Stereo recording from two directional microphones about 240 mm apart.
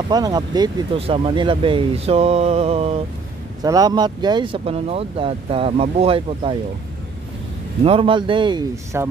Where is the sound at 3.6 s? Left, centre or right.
Centre.